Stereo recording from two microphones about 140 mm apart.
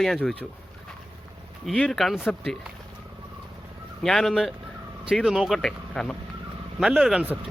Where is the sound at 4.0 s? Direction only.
Centre (ahead or behind).